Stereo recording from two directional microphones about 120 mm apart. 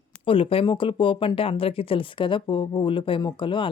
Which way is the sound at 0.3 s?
45° left (ahead or behind).